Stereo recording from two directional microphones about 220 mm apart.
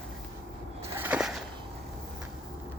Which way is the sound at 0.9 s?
10° right (ahead or behind).